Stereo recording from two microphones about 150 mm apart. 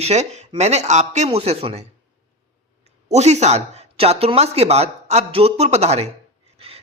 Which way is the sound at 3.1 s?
50° right (ahead or behind).